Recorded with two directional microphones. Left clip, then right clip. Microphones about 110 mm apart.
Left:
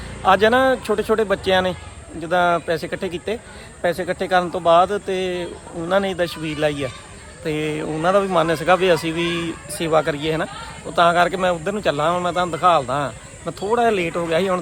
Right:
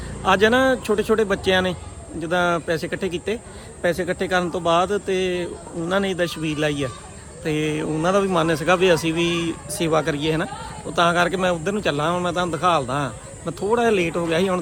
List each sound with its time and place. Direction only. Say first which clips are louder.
0.3 s a man's voice: left 2 dB; 20° right (ahead or behind)